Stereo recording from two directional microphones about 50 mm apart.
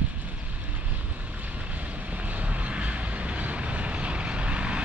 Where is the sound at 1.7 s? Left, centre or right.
Right.